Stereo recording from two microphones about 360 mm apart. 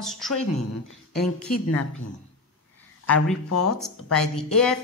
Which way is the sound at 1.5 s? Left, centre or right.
Left.